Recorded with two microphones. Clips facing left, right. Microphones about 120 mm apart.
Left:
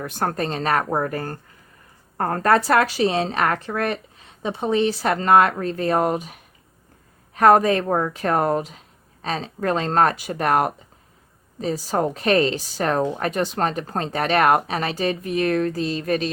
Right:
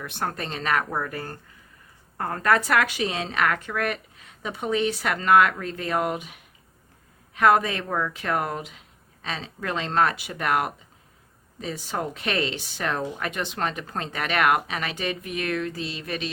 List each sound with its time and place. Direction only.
0.0 s a woman's voice: 40° left (ahead or behind)